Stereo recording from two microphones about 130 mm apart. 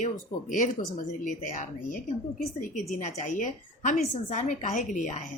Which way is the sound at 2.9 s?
65° left (ahead or behind).